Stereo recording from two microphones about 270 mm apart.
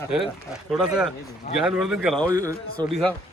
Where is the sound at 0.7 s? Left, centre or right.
Centre.